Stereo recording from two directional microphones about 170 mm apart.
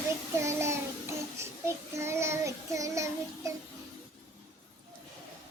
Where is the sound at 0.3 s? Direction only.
15° right (ahead or behind).